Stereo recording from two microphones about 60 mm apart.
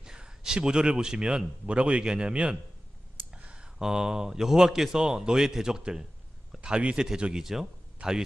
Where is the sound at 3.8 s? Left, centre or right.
Centre.